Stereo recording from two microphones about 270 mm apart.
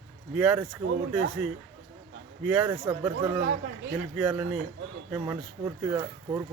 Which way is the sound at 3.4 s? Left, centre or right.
Right.